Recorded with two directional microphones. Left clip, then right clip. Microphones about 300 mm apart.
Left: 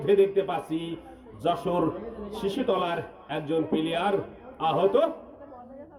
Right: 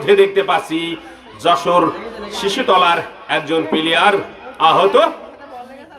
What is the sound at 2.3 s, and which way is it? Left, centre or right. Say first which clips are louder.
A man's voice: right 13 dB; centre.